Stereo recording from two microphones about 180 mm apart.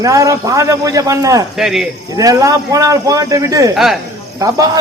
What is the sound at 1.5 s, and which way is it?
Speech, centre (ahead or behind).